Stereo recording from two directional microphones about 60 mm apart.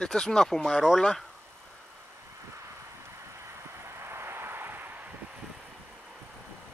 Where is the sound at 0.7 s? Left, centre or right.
Centre.